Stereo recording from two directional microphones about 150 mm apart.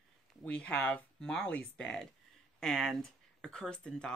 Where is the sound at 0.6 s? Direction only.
10° left (ahead or behind).